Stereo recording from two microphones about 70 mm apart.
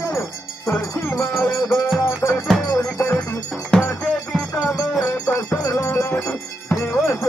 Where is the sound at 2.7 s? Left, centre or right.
Left.